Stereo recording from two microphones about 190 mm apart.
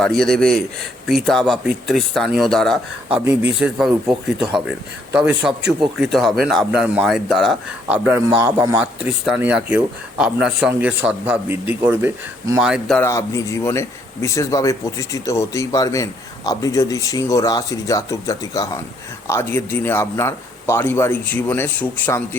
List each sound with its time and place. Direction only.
0.0 s a man's voice: 5° left (ahead or behind)
5.4 s a man's voice: centre (ahead or behind)
13.0 s a man's voice: 15° left (ahead or behind)